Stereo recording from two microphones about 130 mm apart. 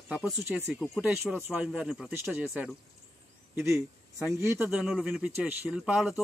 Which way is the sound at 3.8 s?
5° right (ahead or behind).